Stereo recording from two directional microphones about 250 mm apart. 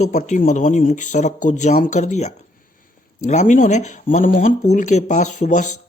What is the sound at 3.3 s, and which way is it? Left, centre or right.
Speech, left.